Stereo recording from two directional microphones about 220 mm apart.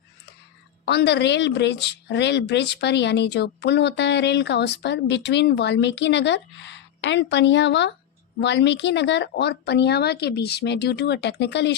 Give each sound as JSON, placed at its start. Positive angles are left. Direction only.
{"t": 0.9, "sound": "a woman's voice", "side_deg": 50}